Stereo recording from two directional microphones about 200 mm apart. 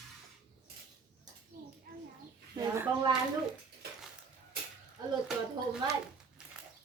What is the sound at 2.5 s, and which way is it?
Speech, 10° right (ahead or behind).